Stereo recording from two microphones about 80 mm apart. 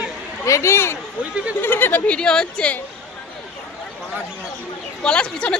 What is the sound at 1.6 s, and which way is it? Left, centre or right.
Speech, left.